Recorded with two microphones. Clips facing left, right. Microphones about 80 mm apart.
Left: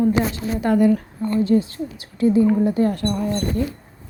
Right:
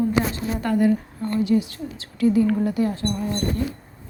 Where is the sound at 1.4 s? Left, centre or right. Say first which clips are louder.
Left 2 dB; left.